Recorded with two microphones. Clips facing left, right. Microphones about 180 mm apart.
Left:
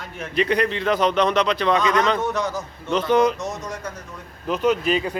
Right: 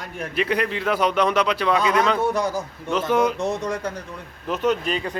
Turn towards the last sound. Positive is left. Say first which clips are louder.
# left 3 dB
turn(degrees=10)  # may be behind; listen again after turning